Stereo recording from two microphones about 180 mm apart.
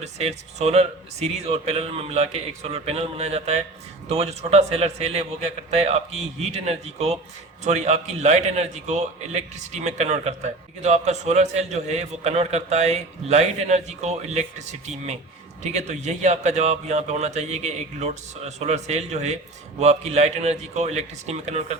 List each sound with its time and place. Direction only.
0.0 s a man's voice: 35° right (ahead or behind)